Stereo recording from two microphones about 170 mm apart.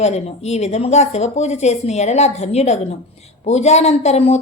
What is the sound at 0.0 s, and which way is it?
A woman's voice, 40° left (ahead or behind).